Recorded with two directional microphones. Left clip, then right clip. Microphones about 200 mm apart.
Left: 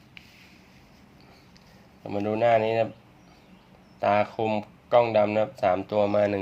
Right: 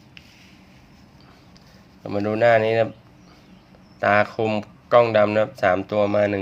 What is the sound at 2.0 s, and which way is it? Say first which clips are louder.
Speech: right 5 dB; 10° right (ahead or behind).